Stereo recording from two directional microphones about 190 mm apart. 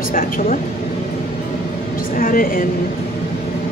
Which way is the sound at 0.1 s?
45° left (ahead or behind).